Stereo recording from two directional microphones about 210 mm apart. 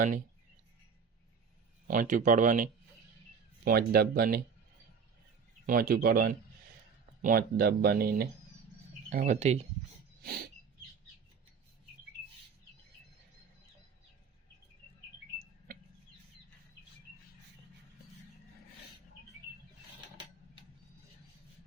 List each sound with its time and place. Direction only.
1.9 s speech: 40° right (ahead or behind)
5.6 s speech: 45° right (ahead or behind)
10.2 s rodents: 45° right (ahead or behind)
15.4 s a sound: 45° right (ahead or behind)